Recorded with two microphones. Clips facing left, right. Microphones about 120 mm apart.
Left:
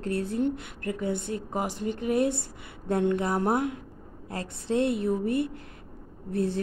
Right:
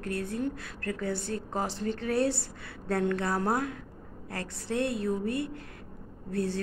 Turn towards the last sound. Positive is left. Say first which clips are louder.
# left 3 dB
turn(degrees=25)  # may be behind; listen again after turning